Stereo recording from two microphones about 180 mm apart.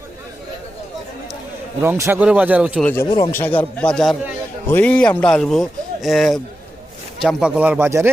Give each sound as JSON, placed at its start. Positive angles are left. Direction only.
{"t": 1.8, "sound": "speech", "side_deg": -15}
{"t": 2.8, "sound": "a man's voice", "side_deg": 10}
{"t": 3.1, "sound": "speech", "side_deg": 20}
{"t": 3.4, "sound": "a man's voice", "side_deg": 10}